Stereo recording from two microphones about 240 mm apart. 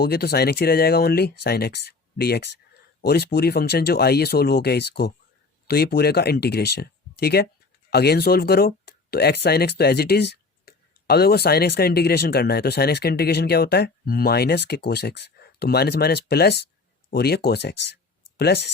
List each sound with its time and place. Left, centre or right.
0.0 s speech: left